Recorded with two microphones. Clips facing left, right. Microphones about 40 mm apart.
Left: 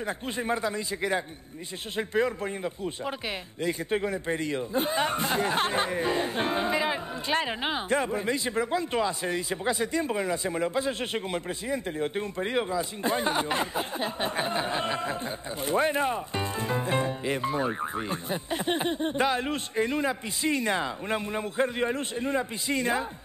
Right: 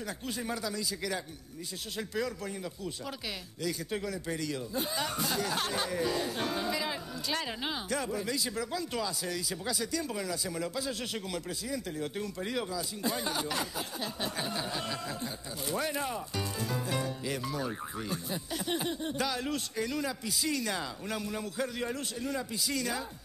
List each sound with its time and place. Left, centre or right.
0.0 s a man's voice: left